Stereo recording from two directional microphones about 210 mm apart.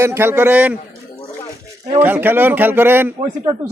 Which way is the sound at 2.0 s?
10° right (ahead or behind).